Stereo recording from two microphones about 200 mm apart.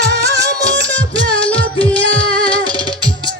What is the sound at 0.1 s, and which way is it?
Music, 55° right (ahead or behind).